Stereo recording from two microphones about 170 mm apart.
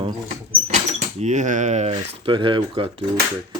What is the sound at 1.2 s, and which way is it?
Speech, 45° right (ahead or behind).